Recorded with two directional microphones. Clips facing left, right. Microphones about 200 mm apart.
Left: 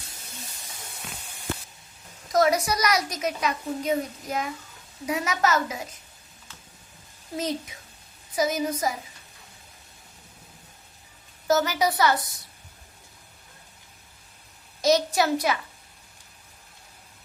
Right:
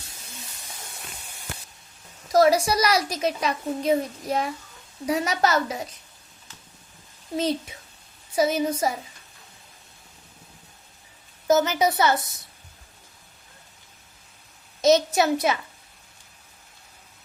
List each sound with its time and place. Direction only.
2.3 s a woman's voice: 30° right (ahead or behind)
8.4 s a woman's voice: 30° right (ahead or behind)
11.4 s a woman's voice: 20° right (ahead or behind)
14.8 s a woman's voice: 25° right (ahead or behind)